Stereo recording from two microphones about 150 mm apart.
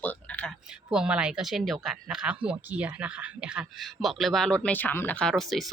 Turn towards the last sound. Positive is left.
turn(degrees=0)  # may be behind; listen again after turning